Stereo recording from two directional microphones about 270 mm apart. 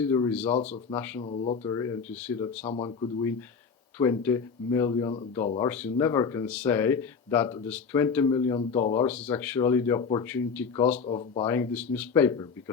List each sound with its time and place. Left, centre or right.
0.0 s speech: centre
1.2 s speech: left
2.6 s speech: centre
11.0 s speech: left
11.4 s speech: centre